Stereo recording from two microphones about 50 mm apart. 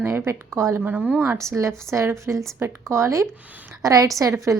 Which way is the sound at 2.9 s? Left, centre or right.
Right.